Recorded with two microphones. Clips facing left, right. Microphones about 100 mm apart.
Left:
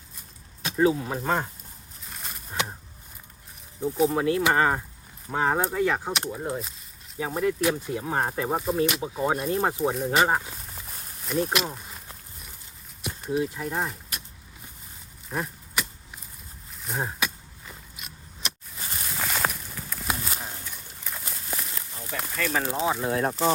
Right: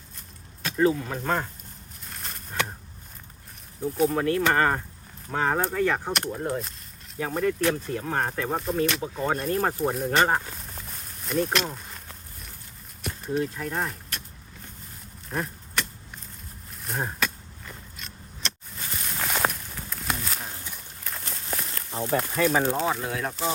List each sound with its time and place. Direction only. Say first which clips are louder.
0.6 s speech: even; 15° left (ahead or behind)
2.0 s a sound: even; 5° left (ahead or behind)
4.1 s speech: even; 15° left (ahead or behind)
9.8 s speech: even; centre (ahead or behind)
11.3 s a sound: even; 5° left (ahead or behind)
13.0 s speech: left 1 dB; 5° left (ahead or behind)
15.3 s vehicle: even; 5° left (ahead or behind)
16.8 s a sound: even; 5° left (ahead or behind)
21.9 s speech: right 12 dB; 30° right (ahead or behind)
22.4 s speech: right 1 dB; centre (ahead or behind)
23.0 s speech: left 5 dB; 35° left (ahead or behind)